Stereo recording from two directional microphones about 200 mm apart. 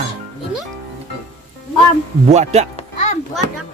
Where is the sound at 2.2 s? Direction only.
35° right (ahead or behind).